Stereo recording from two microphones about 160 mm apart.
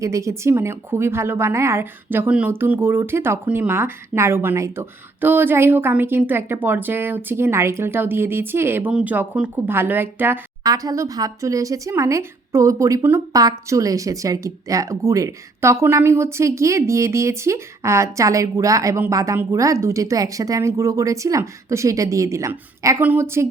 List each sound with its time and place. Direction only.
0.0 s a woman's voice: 20° right (ahead or behind)
10.6 s speech: 25° right (ahead or behind)